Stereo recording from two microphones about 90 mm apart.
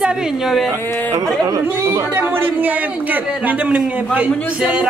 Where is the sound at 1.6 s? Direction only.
25° right (ahead or behind).